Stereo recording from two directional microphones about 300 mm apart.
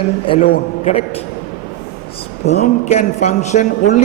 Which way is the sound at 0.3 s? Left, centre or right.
Left.